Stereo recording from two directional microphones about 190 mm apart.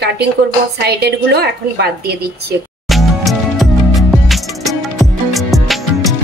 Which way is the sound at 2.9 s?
Centre (ahead or behind).